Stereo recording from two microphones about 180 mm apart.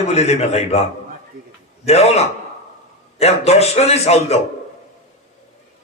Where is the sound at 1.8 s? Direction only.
35° left (ahead or behind).